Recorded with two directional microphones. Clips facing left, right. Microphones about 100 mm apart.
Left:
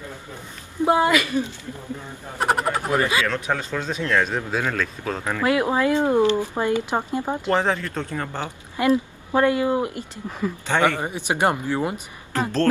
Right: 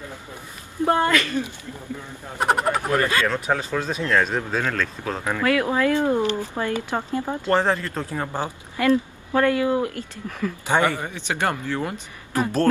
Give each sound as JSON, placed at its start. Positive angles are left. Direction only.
{"t": 0.8, "sound": "speech", "side_deg": 15}
{"t": 2.3, "sound": "speech", "side_deg": 0}
{"t": 2.9, "sound": "speech", "side_deg": 15}
{"t": 3.3, "sound": "speech", "side_deg": -10}
{"t": 5.4, "sound": "speech", "side_deg": 20}
{"t": 7.5, "sound": "speech", "side_deg": 0}
{"t": 8.7, "sound": "speech", "side_deg": 20}
{"t": 12.3, "sound": "speech", "side_deg": -15}